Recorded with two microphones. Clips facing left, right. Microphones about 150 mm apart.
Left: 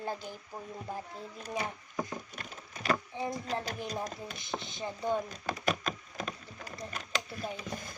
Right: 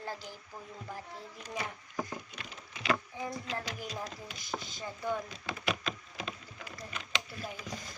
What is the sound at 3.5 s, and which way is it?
Speech, 45° left (ahead or behind).